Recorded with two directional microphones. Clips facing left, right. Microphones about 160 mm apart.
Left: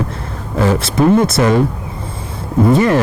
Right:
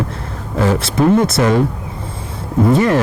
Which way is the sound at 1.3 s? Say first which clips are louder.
Left 1 dB; 15° left (ahead or behind).